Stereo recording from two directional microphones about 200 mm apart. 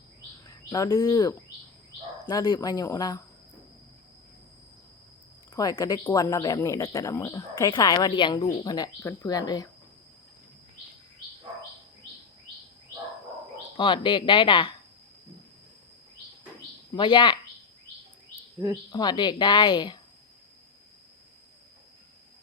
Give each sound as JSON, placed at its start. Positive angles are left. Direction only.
{"t": 0.4, "sound": "a woman's voice", "side_deg": 20}
{"t": 5.5, "sound": "speech", "side_deg": 15}
{"t": 13.7, "sound": "a woman's voice", "side_deg": 25}
{"t": 16.9, "sound": "a woman's voice", "side_deg": 20}
{"t": 18.9, "sound": "a woman's voice", "side_deg": 20}